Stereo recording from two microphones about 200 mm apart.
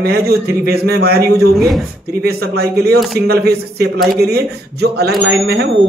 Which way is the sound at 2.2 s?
50° right (ahead or behind).